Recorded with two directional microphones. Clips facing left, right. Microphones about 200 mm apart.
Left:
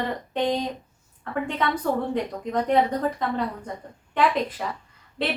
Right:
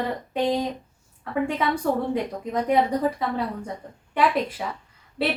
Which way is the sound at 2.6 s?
10° right (ahead or behind).